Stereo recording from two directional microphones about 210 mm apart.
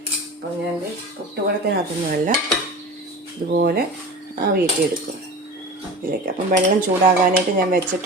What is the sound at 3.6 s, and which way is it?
Speech, 45° right (ahead or behind).